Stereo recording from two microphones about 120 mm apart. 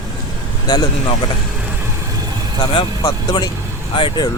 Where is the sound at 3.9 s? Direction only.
45° left (ahead or behind).